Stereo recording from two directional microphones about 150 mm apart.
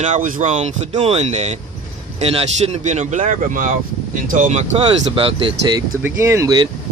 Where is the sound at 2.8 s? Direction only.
50° right (ahead or behind); by 5.8 s 30° right (ahead or behind).